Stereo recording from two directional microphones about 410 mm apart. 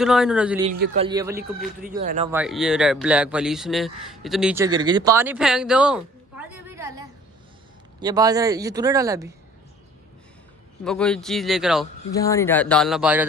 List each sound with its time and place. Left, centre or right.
0.0 s speech: centre
0.7 s speech: centre
2.3 s speech: centre
10.8 s speech: centre